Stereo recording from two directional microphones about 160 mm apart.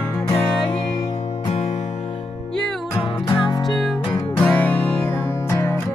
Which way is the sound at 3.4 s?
25° left (ahead or behind).